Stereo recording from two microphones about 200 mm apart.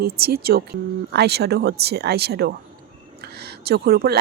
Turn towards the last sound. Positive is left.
turn(degrees=-50)  # may be behind; listen again after turning